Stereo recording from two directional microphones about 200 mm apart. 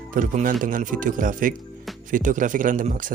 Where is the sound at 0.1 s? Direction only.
40° right (ahead or behind).